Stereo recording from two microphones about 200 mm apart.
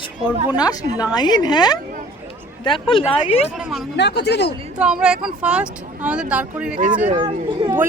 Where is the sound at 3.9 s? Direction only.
60° left (ahead or behind).